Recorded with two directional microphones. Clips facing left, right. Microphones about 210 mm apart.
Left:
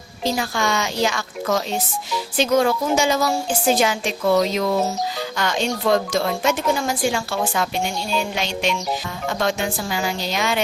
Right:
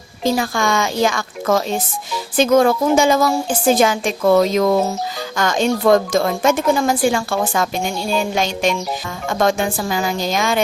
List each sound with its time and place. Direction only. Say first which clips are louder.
0.3 s a woman's voice: right 4 dB; 50° right (ahead or behind)